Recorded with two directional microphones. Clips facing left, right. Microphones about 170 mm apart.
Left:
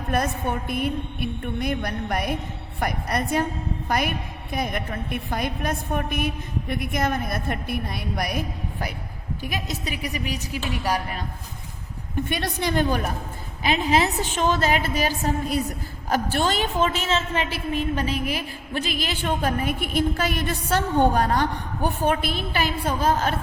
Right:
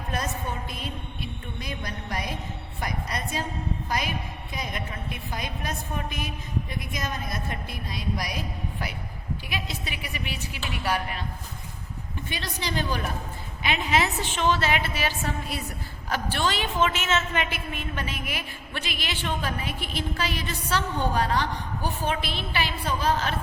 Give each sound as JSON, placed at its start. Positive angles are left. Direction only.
{"t": 0.1, "sound": "a woman's voice", "side_deg": 60}
{"t": 12.3, "sound": "a woman's voice", "side_deg": 55}
{"t": 13.6, "sound": "a woman's voice", "side_deg": 40}